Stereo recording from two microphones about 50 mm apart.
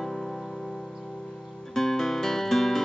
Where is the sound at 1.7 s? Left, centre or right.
Centre.